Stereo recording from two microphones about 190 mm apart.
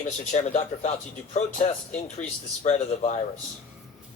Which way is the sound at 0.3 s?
40° left (ahead or behind).